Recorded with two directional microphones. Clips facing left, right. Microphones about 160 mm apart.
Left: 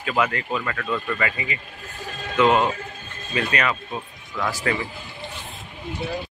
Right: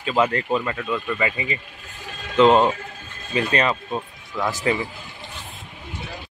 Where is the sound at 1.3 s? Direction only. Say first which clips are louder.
Right 2 dB; 25° right (ahead or behind).